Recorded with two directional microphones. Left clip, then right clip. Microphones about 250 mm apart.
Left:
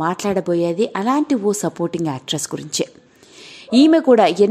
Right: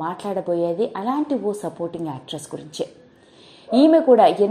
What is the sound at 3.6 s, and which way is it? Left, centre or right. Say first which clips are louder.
Speech: left 1 dB; left.